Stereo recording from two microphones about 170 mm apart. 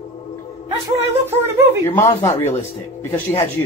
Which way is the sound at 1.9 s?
15° left (ahead or behind).